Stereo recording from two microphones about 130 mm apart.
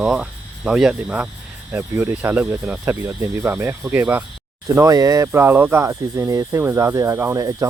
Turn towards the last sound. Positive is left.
turn(degrees=-25)  # may be behind; listen again after turning